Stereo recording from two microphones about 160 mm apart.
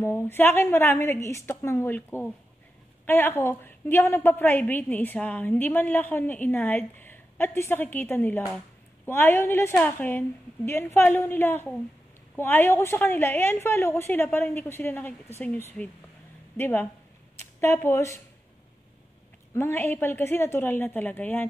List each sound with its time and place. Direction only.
0.0 s a woman's voice: 15° left (ahead or behind)
19.5 s a woman's voice: 15° left (ahead or behind)